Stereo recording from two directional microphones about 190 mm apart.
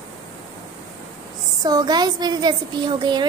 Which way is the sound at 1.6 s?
20° right (ahead or behind).